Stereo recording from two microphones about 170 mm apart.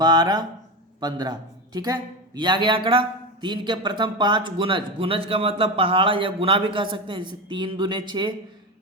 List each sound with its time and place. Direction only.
0.0 s a man's voice: 25° right (ahead or behind)